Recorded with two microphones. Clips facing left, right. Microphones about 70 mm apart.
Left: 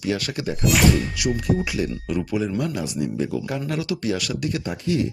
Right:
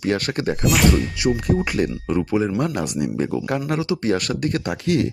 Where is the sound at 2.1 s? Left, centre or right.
Right.